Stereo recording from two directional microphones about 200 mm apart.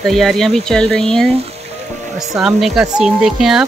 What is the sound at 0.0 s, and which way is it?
Speech, centre (ahead or behind).